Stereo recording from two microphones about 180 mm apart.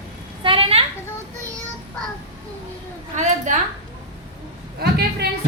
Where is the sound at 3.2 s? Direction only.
45° right (ahead or behind).